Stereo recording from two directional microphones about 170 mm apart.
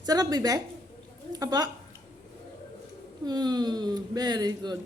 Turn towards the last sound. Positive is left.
turn(degrees=-25)  # may be behind; listen again after turning